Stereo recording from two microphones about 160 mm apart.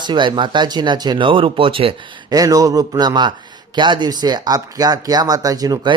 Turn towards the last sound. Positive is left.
turn(degrees=-25)  # may be behind; listen again after turning